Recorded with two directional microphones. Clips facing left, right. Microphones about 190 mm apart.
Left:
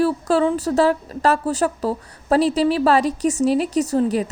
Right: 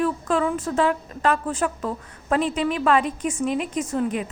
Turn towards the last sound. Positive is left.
turn(degrees=35)  # may be behind; listen again after turning